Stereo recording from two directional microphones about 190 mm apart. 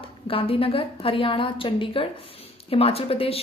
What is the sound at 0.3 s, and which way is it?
Speech, 30° left (ahead or behind).